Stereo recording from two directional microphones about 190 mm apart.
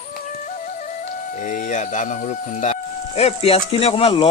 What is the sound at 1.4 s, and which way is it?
Speech, 40° left (ahead or behind).